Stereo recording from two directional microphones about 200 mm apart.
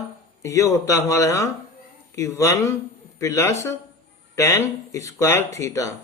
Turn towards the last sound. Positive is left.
turn(degrees=15)  # may be behind; listen again after turning